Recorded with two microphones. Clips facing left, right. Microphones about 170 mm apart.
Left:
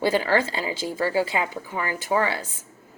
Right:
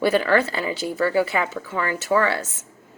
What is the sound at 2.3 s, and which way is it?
Speech, 75° right (ahead or behind).